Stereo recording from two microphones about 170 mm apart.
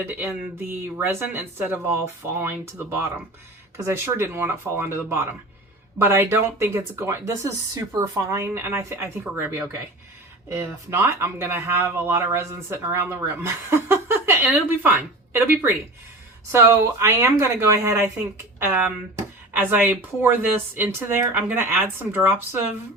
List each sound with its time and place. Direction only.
0.1 s speech: 10° right (ahead or behind)
3.8 s speech: 15° right (ahead or behind)